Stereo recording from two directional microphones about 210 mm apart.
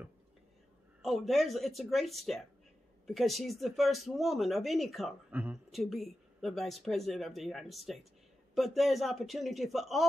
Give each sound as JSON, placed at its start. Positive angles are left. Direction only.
{"t": 1.0, "sound": "speech", "side_deg": 0}